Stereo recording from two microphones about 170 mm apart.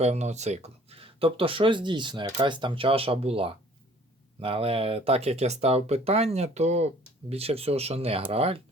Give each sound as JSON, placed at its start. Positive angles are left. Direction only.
{"t": 0.0, "sound": "speech", "side_deg": -40}